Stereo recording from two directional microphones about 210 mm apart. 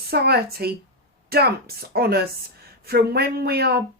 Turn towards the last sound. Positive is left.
turn(degrees=-50)  # may be behind; listen again after turning